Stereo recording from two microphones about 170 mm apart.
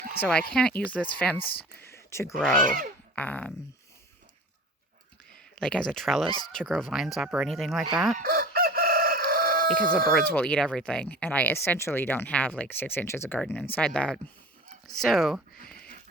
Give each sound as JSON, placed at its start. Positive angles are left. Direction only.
{"t": 0.2, "sound": "speech", "side_deg": 5}
{"t": 2.6, "sound": "speech", "side_deg": -55}
{"t": 3.2, "sound": "speech", "side_deg": 10}
{"t": 5.3, "sound": "speech", "side_deg": 5}
{"t": 8.2, "sound": "chicken", "side_deg": -60}
{"t": 10.2, "sound": "speech", "side_deg": 10}